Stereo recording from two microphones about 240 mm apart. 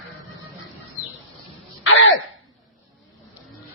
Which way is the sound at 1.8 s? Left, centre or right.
Left.